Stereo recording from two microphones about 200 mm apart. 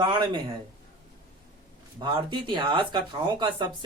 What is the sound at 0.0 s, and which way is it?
Speech, 25° right (ahead or behind).